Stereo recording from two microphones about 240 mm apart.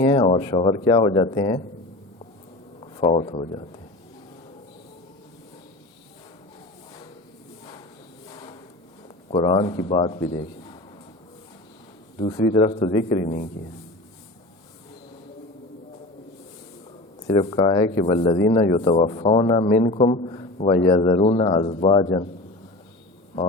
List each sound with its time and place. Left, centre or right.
0.0 s speech: left
2.8 s speech: left
8.3 s a sound: centre
9.3 s speech: left
12.2 s speech: left
17.2 s speech: left